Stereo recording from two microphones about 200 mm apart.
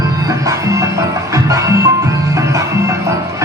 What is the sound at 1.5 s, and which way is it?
Music, 15° right (ahead or behind).